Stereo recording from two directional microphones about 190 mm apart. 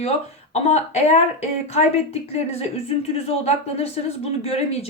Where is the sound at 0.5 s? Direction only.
35° left (ahead or behind).